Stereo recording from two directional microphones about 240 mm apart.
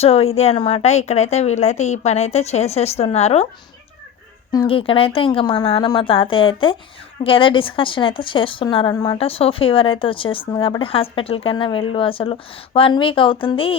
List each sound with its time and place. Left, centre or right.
0.0 s a woman's voice: left
4.5 s a woman's voice: left